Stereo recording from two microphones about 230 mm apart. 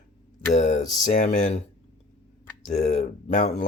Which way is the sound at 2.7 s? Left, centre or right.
Left.